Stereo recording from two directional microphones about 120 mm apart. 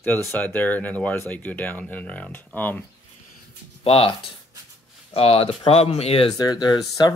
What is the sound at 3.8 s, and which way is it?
Speech, 55° left (ahead or behind).